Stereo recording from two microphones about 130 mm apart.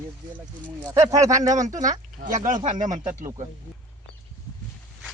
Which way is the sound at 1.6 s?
70° right (ahead or behind).